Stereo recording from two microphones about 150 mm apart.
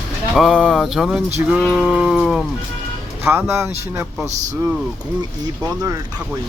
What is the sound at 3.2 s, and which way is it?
Speech, 15° right (ahead or behind).